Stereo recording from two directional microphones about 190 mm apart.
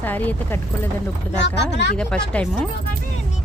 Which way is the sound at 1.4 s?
65° left (ahead or behind).